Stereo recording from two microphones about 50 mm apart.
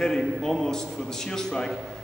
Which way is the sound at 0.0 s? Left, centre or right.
Centre.